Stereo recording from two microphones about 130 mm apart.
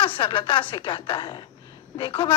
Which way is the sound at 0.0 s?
40° left (ahead or behind).